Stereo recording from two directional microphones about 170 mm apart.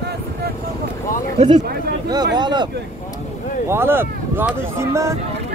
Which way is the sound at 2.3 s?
25° right (ahead or behind).